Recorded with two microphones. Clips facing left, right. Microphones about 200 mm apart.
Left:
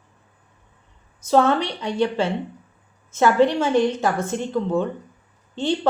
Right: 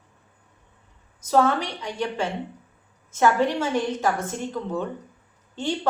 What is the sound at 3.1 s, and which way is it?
A woman's voice, 30° left (ahead or behind).